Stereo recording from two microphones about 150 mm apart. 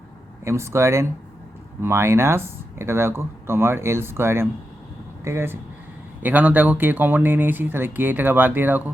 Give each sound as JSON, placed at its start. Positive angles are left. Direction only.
{"t": 0.4, "sound": "speech", "side_deg": -20}